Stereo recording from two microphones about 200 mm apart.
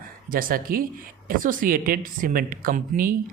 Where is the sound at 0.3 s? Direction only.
45° right (ahead or behind).